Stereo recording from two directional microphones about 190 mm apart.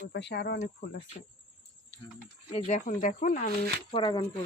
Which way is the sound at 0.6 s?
45° left (ahead or behind).